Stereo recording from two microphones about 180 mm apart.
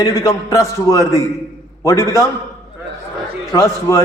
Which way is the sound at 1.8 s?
15° left (ahead or behind).